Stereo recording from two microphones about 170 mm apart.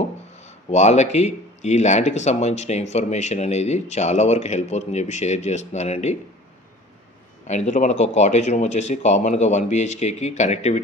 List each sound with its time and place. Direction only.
0.4 s speech: 40° left (ahead or behind)
7.4 s speech: 45° left (ahead or behind)